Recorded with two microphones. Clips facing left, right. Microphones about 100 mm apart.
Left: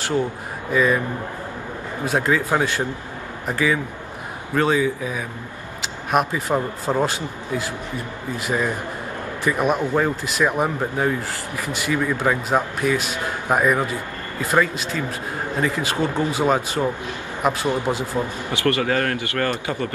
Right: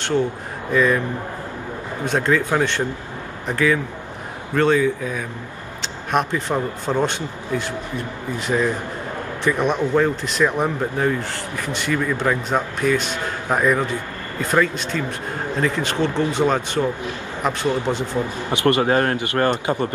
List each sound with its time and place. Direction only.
0.7 s a man's voice: 10° left (ahead or behind)
2.0 s speech: 5° left (ahead or behind)
18.5 s a man's voice: 20° right (ahead or behind)